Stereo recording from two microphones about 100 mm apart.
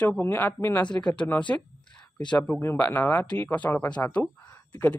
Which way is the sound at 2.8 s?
25° left (ahead or behind).